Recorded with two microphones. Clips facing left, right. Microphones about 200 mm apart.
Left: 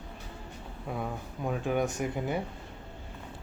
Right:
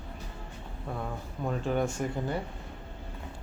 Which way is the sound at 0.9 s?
5° left (ahead or behind).